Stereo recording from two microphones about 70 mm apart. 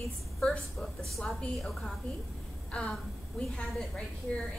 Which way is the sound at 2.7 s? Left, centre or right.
Centre.